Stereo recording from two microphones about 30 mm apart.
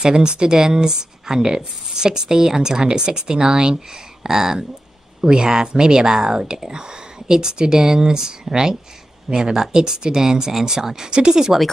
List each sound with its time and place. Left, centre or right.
0.0 s speech: right
5.2 s speech: right